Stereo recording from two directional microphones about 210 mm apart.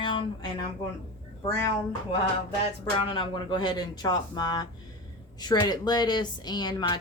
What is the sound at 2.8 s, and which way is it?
Speech, 25° left (ahead or behind).